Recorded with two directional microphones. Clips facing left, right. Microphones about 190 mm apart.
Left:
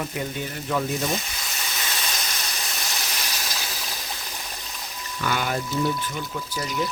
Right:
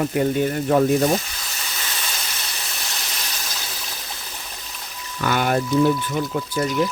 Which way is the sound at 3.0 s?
10° left (ahead or behind).